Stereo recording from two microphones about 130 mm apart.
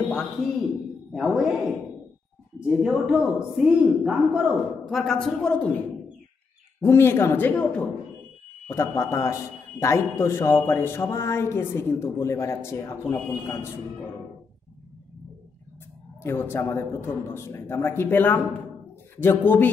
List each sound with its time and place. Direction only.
1.1 s a man's voice: 5° right (ahead or behind)
2.6 s a man's voice: 5° right (ahead or behind)
6.8 s a man's voice: 20° left (ahead or behind)
16.2 s a man's voice: 20° left (ahead or behind)